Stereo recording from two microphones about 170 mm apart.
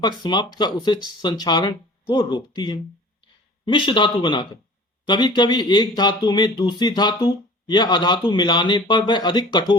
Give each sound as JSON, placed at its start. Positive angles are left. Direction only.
{"t": 0.0, "sound": "speech", "side_deg": 25}